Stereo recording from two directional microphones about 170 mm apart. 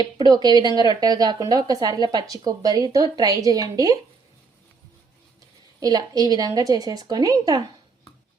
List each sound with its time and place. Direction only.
0.0 s speech: 25° right (ahead or behind)
5.8 s speech: 20° right (ahead or behind)